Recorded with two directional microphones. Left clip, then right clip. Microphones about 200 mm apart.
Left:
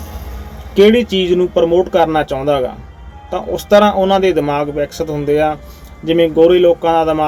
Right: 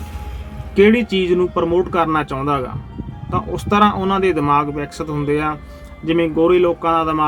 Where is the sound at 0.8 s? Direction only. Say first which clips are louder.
Left 4 dB; 45° right (ahead or behind).